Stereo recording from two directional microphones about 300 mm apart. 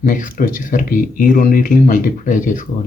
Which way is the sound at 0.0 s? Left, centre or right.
Left.